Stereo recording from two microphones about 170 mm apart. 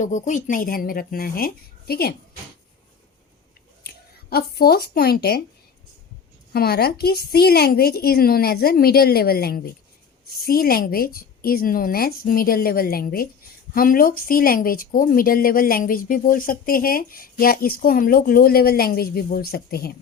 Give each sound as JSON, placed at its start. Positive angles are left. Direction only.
{"t": 0.0, "sound": "speech", "side_deg": 45}
{"t": 3.8, "sound": "speech", "side_deg": 65}
{"t": 6.5, "sound": "speech", "side_deg": 65}